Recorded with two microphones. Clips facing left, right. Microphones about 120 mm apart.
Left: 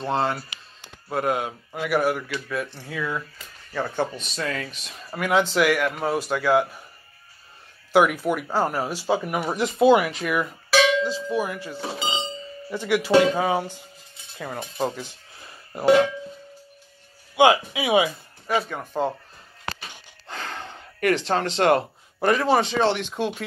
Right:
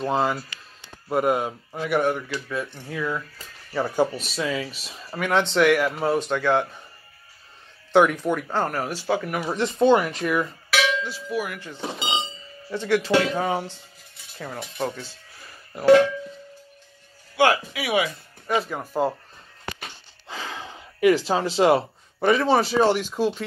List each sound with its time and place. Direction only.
0.0 s speech: 5° right (ahead or behind)
2.6 s speech: 20° right (ahead or behind)
2.9 s speech: 5° left (ahead or behind)
3.7 s speech: 10° right (ahead or behind); by 6.8 s 5° left (ahead or behind)
7.9 s speech: 5° left (ahead or behind)
9.6 s speech: 5° left (ahead or behind)
10.7 s music: 20° left (ahead or behind)
11.2 s speech: 25° left (ahead or behind)
11.6 s speech: 10° left (ahead or behind)
14.6 s speech: 25° left (ahead or behind)
17.4 s speech: 20° left (ahead or behind)
18.5 s speech: centre (ahead or behind)
20.2 s speech: centre (ahead or behind)